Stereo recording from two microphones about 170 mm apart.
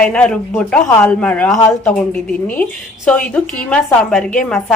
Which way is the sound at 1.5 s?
20° left (ahead or behind).